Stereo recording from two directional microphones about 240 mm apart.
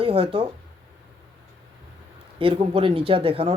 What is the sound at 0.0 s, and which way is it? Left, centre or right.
Speech, right.